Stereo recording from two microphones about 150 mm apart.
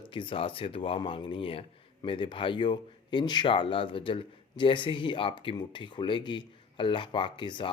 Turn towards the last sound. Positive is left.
turn(degrees=30)  # may be behind; listen again after turning